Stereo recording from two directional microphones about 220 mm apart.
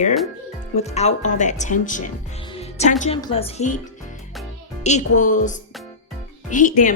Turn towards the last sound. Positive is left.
turn(degrees=35)  # may be behind; listen again after turning